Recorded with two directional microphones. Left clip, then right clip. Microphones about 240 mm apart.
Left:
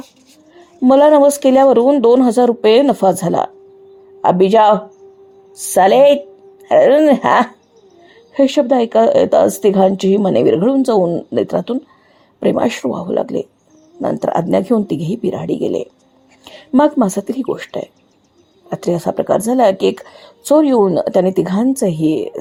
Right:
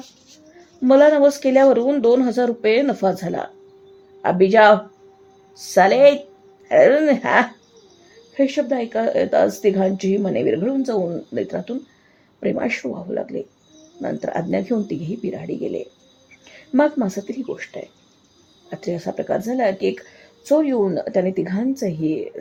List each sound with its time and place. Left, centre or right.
0.8 s a woman's voice: left